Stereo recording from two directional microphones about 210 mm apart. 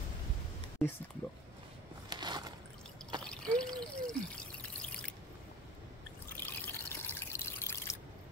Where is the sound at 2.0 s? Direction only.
20° right (ahead or behind).